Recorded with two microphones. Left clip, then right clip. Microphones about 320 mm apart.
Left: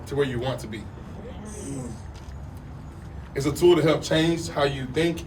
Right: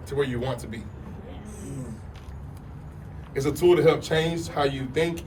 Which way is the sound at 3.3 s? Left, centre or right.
Centre.